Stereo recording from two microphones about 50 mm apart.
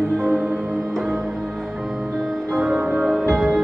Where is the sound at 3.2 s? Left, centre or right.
Centre.